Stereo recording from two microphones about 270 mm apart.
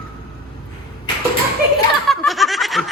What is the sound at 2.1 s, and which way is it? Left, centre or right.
Snicker, centre.